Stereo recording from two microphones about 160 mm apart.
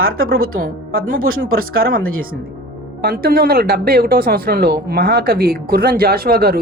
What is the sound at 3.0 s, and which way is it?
Speech, 75° right (ahead or behind).